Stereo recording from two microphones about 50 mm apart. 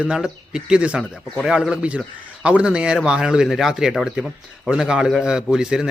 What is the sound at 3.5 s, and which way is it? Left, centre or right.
Speech, centre.